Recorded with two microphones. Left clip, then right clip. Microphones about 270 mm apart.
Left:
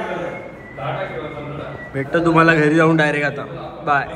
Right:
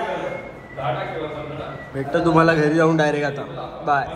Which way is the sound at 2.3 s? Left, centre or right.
Centre.